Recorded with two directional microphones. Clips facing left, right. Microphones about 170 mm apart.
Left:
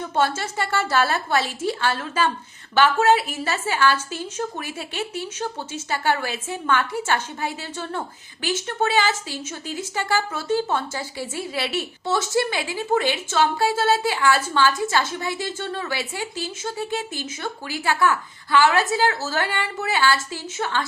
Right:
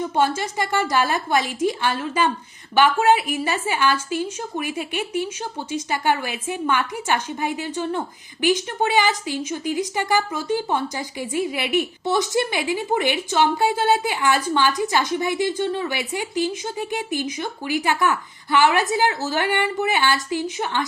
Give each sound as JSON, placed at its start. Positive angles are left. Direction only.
{"t": 0.0, "sound": "a woman's voice", "side_deg": -15}